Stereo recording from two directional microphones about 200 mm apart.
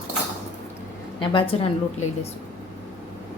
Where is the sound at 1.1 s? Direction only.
25° left (ahead or behind).